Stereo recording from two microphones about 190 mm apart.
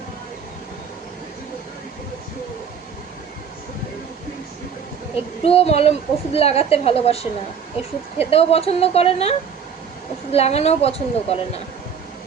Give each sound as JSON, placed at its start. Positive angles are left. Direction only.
{"t": 5.1, "sound": "a woman's voice", "side_deg": 30}
{"t": 8.3, "sound": "a woman's voice", "side_deg": 30}
{"t": 10.3, "sound": "a woman's voice", "side_deg": 35}